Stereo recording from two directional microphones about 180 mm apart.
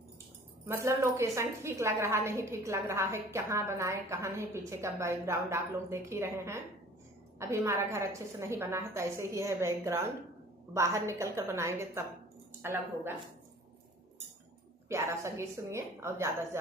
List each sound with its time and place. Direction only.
0.6 s a woman's voice: 15° right (ahead or behind)
14.8 s a woman's voice: 15° right (ahead or behind)